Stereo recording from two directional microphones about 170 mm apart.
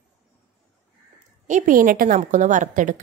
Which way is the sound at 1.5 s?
50° right (ahead or behind).